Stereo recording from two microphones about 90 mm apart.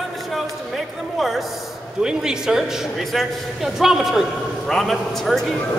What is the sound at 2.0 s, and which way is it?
A man's voice, 5° right (ahead or behind).